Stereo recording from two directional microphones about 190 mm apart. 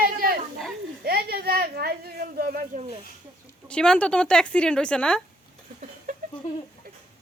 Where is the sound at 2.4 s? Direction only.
50° right (ahead or behind).